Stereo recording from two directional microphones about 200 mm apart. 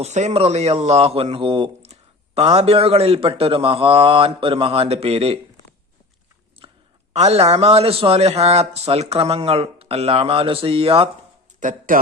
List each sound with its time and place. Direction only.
0.0 s speech: 35° right (ahead or behind)
6.6 s a sound: 25° right (ahead or behind)
7.1 s speech: 30° right (ahead or behind)
11.6 s speech: 40° right (ahead or behind)